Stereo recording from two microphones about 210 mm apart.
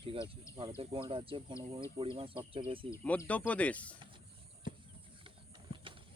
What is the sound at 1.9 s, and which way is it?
Speech, 25° right (ahead or behind).